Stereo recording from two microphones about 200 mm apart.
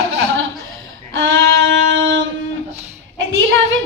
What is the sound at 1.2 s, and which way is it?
Speech, 70° right (ahead or behind).